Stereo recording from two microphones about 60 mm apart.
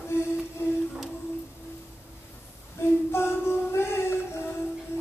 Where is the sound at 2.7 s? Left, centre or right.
Left.